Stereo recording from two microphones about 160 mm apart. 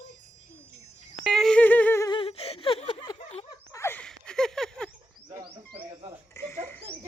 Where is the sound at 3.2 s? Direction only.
40° left (ahead or behind).